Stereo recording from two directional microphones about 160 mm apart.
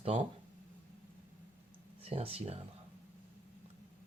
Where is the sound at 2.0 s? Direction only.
40° right (ahead or behind).